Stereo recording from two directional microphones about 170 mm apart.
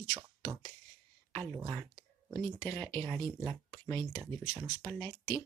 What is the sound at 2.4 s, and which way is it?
Speech, 15° left (ahead or behind).